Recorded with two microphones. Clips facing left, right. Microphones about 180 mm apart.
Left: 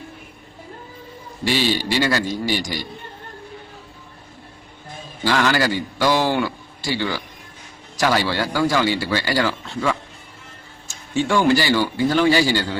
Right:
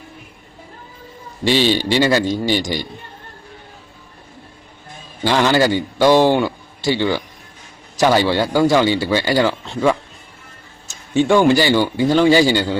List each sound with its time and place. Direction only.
1.5 s speech: 25° right (ahead or behind)
5.2 s speech: 25° right (ahead or behind)